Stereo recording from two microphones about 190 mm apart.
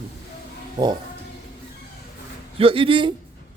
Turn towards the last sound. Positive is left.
turn(degrees=-25)  # may be behind; listen again after turning